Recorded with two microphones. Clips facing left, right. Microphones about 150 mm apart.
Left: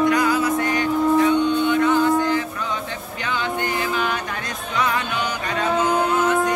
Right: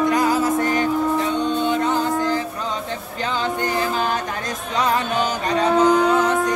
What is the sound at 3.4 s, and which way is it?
Music, 40° right (ahead or behind).